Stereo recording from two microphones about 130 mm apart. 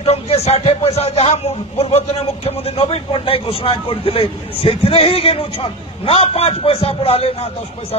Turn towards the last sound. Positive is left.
turn(degrees=50)  # may be behind; listen again after turning